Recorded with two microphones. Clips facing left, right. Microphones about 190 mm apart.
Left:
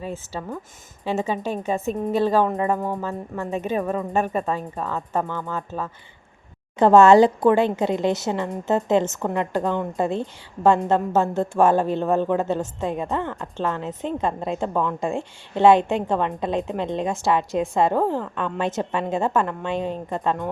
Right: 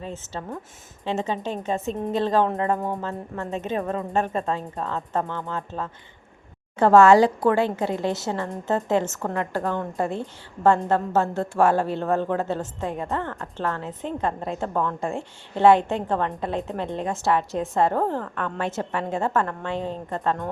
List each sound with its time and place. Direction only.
0.0 s a woman's voice: 10° left (ahead or behind)
6.7 s a woman's voice: 20° left (ahead or behind)